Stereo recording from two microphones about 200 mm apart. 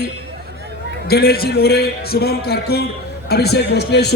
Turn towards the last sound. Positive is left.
turn(degrees=55)  # may be behind; listen again after turning